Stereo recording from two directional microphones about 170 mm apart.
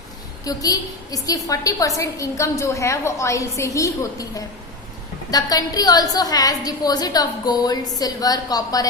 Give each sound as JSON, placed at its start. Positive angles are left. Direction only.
{"t": 0.4, "sound": "a woman's voice", "side_deg": 20}